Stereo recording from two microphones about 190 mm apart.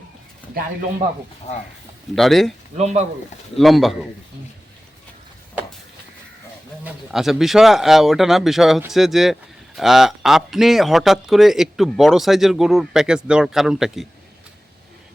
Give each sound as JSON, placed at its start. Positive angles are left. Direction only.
{"t": 2.1, "sound": "speech", "side_deg": 0}
{"t": 2.7, "sound": "speech", "side_deg": -35}
{"t": 3.6, "sound": "speech", "side_deg": 0}
{"t": 7.1, "sound": "speech", "side_deg": 0}